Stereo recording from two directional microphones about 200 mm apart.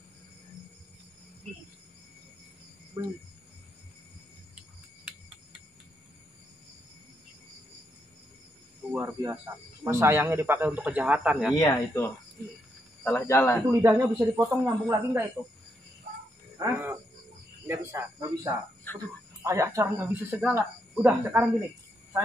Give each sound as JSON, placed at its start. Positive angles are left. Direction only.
{"t": 3.0, "sound": "speech", "side_deg": -15}
{"t": 8.9, "sound": "snake", "side_deg": -15}
{"t": 9.9, "sound": "speech", "side_deg": -10}
{"t": 11.5, "sound": "speech", "side_deg": 15}
{"t": 13.7, "sound": "speech", "side_deg": -15}
{"t": 16.5, "sound": "speech", "side_deg": -15}